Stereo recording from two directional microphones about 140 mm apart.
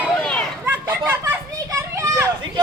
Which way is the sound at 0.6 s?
15° right (ahead or behind).